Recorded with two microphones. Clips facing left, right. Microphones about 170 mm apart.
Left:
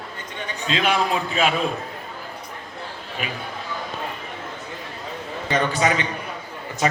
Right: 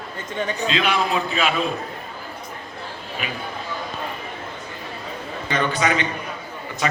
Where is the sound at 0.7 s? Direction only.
45° left (ahead or behind).